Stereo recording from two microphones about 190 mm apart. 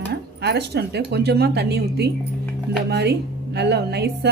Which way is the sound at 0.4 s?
60° right (ahead or behind).